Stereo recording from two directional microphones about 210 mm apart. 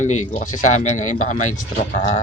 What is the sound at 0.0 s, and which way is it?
Speech, 35° left (ahead or behind).